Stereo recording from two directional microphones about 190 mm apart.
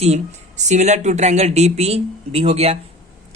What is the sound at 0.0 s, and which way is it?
Speech, 35° right (ahead or behind).